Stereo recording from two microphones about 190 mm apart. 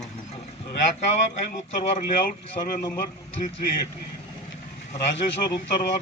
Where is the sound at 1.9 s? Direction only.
50° left (ahead or behind).